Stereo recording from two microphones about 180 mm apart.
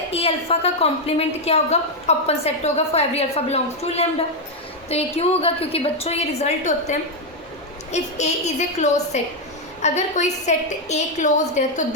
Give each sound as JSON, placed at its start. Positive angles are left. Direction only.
{"t": 0.1, "sound": "a woman's voice", "side_deg": 35}